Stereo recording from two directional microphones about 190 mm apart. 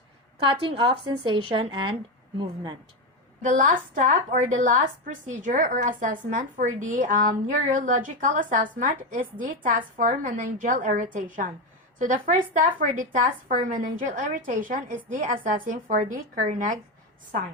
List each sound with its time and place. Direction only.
0.4 s a woman's voice: 25° right (ahead or behind)
3.4 s a woman's voice: 45° right (ahead or behind)